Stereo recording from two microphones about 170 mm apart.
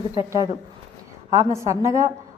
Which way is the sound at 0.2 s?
20° right (ahead or behind).